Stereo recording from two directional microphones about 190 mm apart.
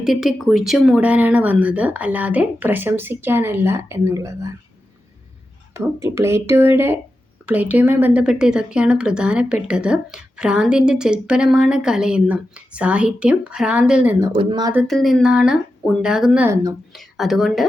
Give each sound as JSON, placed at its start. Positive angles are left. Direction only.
{"t": 0.0, "sound": "speech", "side_deg": 0}
{"t": 5.7, "sound": "speech", "side_deg": -15}
{"t": 14.3, "sound": "speech", "side_deg": -25}
{"t": 14.8, "sound": "speech", "side_deg": 0}
{"t": 16.9, "sound": "speech", "side_deg": 0}